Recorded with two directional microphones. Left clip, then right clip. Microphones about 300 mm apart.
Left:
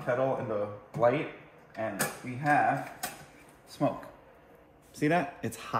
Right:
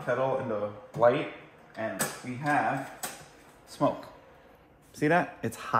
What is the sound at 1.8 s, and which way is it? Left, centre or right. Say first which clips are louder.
Speech: even; centre.